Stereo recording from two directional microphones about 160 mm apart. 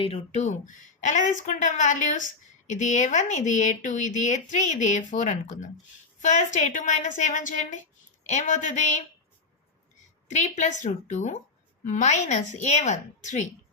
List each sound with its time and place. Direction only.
0.0 s speech: 40° left (ahead or behind)
10.2 s speech: 50° left (ahead or behind)